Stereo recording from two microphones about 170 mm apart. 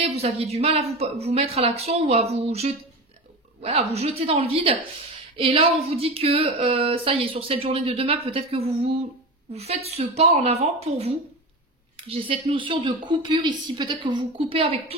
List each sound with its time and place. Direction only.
0.0 s speech: 35° right (ahead or behind)